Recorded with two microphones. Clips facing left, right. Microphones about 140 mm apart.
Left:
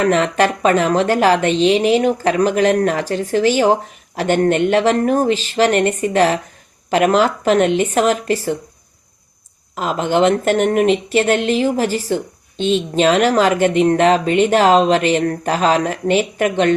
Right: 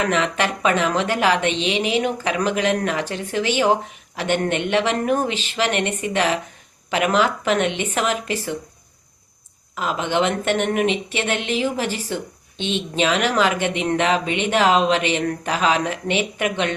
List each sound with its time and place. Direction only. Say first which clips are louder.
0.0 s speech: left 6 dB; 40° left (ahead or behind)
9.7 s speech: left 5 dB; 40° left (ahead or behind)